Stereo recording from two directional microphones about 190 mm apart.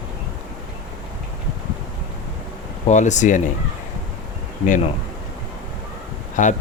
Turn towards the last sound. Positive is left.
turn(degrees=40)  # may be behind; listen again after turning